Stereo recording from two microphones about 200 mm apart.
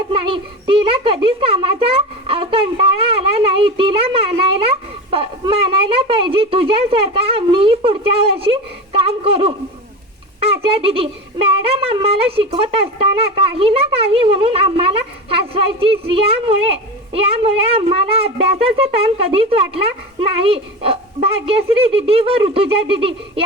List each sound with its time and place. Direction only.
0.1 s a child's voice: 25° right (ahead or behind)